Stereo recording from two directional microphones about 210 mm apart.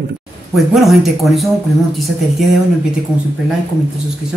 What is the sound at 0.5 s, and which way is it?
Speech, centre (ahead or behind).